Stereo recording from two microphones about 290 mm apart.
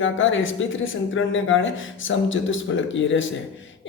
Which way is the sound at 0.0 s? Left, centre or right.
Left.